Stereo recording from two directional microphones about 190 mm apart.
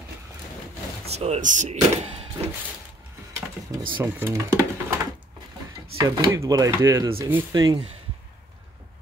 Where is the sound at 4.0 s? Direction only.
10° right (ahead or behind).